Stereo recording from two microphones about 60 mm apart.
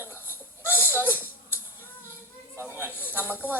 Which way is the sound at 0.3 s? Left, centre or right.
Right.